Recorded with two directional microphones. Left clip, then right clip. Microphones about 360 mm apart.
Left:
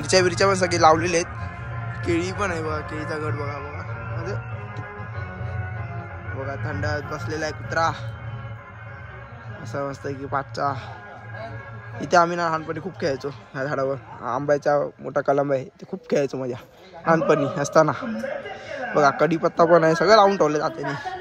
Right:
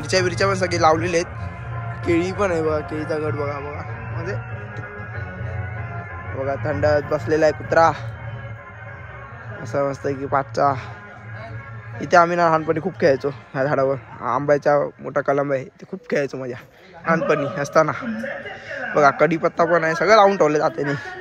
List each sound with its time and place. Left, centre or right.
0.0 s a man's voice: centre
6.4 s a man's voice: centre
9.7 s a man's voice: centre
12.0 s a man's voice: centre
18.5 s a sound: left
18.9 s a man's voice: centre